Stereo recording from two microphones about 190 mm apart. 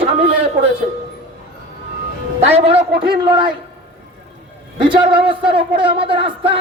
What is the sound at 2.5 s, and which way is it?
A man's voice, 35° right (ahead or behind).